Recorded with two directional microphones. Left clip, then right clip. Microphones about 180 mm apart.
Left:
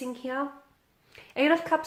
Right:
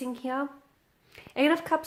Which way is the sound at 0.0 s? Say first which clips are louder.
Even; 35° right (ahead or behind).